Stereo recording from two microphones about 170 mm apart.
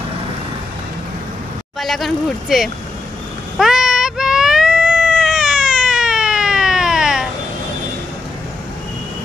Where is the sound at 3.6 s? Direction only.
5° right (ahead or behind).